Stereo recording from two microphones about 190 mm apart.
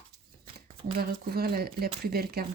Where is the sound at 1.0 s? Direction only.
55° right (ahead or behind).